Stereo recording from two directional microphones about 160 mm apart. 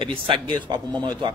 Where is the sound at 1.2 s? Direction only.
30° right (ahead or behind).